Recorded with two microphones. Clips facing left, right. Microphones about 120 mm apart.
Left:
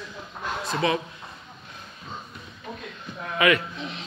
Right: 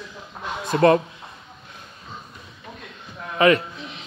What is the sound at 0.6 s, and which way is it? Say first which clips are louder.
Speech: right 9 dB; 50° right (ahead or behind).